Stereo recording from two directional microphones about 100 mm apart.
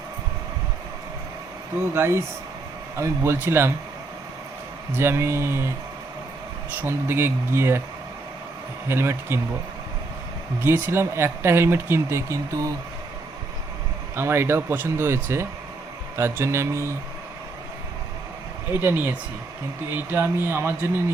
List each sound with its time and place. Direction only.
1.9 s speech: 25° right (ahead or behind)
4.9 s speech: 25° right (ahead or behind)
6.8 s speech: 25° right (ahead or behind)
8.9 s speech: 25° right (ahead or behind)
10.6 s speech: 20° right (ahead or behind)
14.2 s speech: 25° right (ahead or behind)
18.7 s speech: 20° right (ahead or behind)